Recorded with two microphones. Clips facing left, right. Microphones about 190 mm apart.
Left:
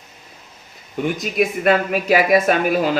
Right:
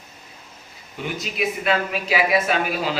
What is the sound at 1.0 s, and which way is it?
Speech, 50° left (ahead or behind).